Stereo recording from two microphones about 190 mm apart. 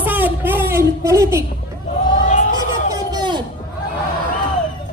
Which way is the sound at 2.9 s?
20° right (ahead or behind).